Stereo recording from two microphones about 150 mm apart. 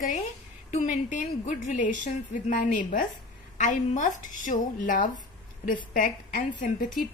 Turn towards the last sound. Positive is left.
turn(degrees=65)  # may be behind; listen again after turning